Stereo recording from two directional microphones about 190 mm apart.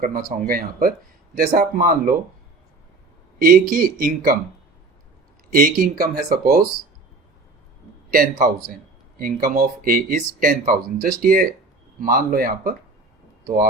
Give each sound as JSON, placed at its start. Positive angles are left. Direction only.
{"t": 0.0, "sound": "speech", "side_deg": -50}
{"t": 3.3, "sound": "speech", "side_deg": -50}
{"t": 5.5, "sound": "speech", "side_deg": -50}
{"t": 8.1, "sound": "speech", "side_deg": -50}